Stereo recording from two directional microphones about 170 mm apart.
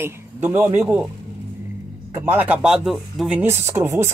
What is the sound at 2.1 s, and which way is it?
Speech, 10° right (ahead or behind).